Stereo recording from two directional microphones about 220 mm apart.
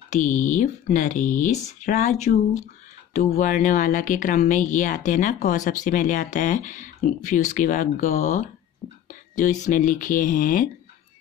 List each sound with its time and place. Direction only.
0.1 s speech: 35° left (ahead or behind)